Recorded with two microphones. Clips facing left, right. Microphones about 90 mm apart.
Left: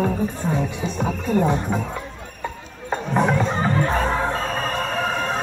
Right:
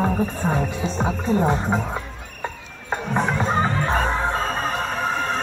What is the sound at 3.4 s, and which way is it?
Music, 15° right (ahead or behind).